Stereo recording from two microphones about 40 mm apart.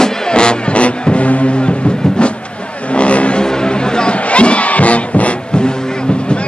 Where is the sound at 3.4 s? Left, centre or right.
Left.